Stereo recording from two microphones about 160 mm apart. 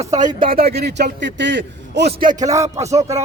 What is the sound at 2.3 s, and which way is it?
Speech, 20° right (ahead or behind).